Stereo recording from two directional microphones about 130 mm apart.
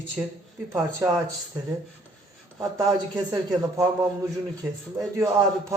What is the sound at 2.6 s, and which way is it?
Speech, 25° right (ahead or behind).